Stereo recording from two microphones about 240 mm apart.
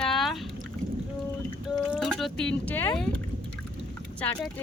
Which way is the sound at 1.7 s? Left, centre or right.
Centre.